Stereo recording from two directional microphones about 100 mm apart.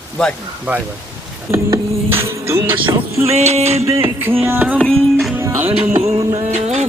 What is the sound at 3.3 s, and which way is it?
Music, 90° right.